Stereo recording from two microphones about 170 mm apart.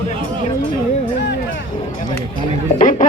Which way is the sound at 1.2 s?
90° left.